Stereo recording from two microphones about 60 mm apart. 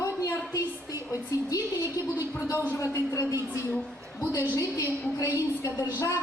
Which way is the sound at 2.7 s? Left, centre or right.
Left.